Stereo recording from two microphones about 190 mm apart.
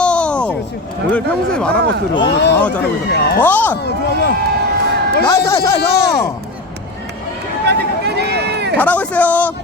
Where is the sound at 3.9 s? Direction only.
60° left (ahead or behind).